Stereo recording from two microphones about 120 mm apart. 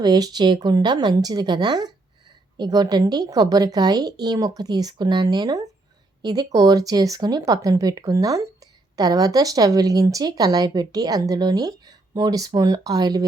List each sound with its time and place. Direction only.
0.0 s speech: 35° right (ahead or behind)